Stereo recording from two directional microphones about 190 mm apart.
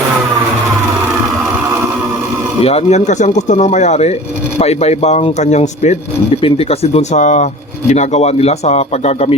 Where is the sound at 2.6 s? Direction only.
30° left (ahead or behind).